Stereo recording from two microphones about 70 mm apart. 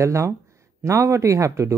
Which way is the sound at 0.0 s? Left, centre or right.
Right.